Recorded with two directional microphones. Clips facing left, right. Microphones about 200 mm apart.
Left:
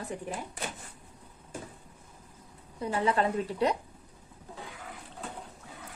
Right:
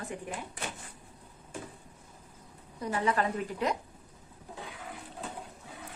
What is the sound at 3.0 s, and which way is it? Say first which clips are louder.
Speech: left 2 dB; 30° left (ahead or behind).